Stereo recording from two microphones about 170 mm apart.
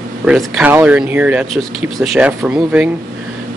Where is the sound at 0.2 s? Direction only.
5° right (ahead or behind).